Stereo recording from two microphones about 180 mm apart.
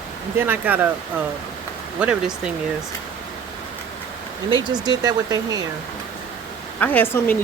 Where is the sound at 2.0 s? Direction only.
5° right (ahead or behind).